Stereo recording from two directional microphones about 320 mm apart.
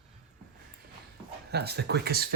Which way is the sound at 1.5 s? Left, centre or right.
Right.